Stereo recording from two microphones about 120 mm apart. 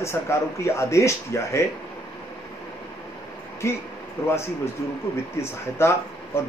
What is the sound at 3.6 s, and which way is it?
Speech, 20° left (ahead or behind).